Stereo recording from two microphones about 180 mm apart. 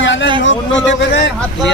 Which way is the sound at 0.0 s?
90° left.